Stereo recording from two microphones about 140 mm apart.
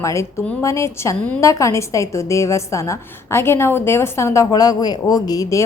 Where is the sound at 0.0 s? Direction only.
20° left (ahead or behind).